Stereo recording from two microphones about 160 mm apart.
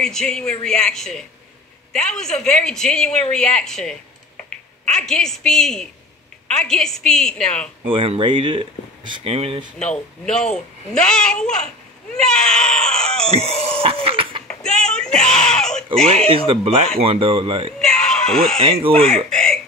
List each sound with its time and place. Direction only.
0.0 s a woman's voice: 5° left (ahead or behind)
7.8 s speech: 35° right (ahead or behind)
9.8 s a woman's voice: 5° left (ahead or behind)
13.3 s speech: 40° right (ahead or behind)
14.5 s a sound: 5° left (ahead or behind)
16.3 s speech: 35° right (ahead or behind)
17.7 s screaming: 5° left (ahead or behind)
18.6 s speech: 35° right (ahead or behind)
19.3 s speech: 5° left (ahead or behind)